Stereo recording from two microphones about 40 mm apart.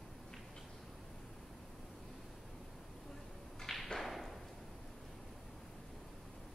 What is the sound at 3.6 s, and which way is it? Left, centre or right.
Thump, centre.